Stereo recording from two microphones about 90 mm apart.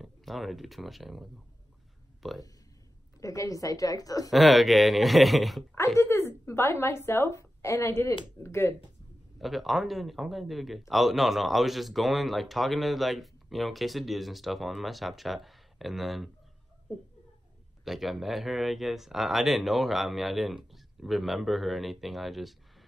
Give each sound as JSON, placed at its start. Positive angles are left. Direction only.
{"t": 0.0, "sound": "speech", "side_deg": 0}
{"t": 3.2, "sound": "a woman's voice", "side_deg": 40}
{"t": 4.3, "sound": "a man's voice", "side_deg": 0}
{"t": 5.9, "sound": "a woman's voice", "side_deg": 25}
{"t": 9.4, "sound": "a man's voice", "side_deg": 0}
{"t": 17.8, "sound": "a man's voice", "side_deg": -5}